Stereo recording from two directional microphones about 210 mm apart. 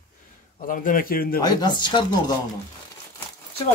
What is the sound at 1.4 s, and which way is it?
Speech, 20° left (ahead or behind).